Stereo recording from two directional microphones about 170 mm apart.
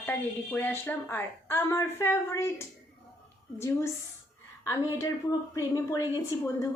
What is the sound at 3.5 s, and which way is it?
Speech, 15° left (ahead or behind).